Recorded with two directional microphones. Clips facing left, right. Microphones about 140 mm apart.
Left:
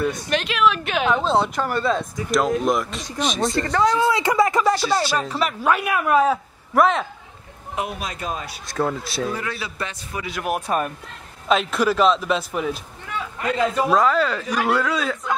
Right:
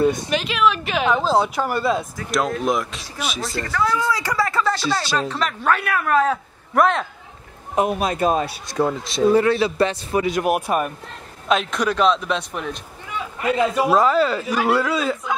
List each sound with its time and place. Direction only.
0.3 s speech: centre (ahead or behind)
3.5 s speech: 25° left (ahead or behind); by 7.1 s centre (ahead or behind)
7.7 s a man's voice: 45° right (ahead or behind)
8.8 s speech: 5° left (ahead or behind)
9.3 s a man's voice: 30° right (ahead or behind)
10.3 s speech: 20° right (ahead or behind)
11.4 s speech: centre (ahead or behind)
13.4 s speech: 10° right (ahead or behind)